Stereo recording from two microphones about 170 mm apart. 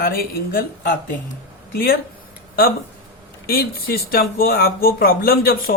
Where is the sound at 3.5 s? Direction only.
65° left (ahead or behind).